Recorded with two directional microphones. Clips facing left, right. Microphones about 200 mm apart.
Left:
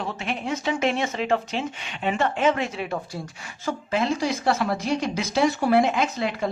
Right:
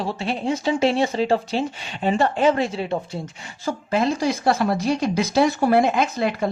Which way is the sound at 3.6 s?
40° right (ahead or behind).